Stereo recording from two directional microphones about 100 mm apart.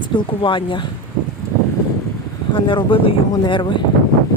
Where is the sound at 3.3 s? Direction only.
50° left (ahead or behind).